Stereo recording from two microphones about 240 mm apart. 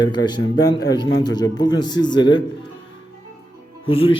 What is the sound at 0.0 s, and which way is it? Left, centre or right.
A man's voice, centre.